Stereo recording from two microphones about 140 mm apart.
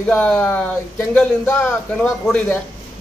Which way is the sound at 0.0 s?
5° left (ahead or behind).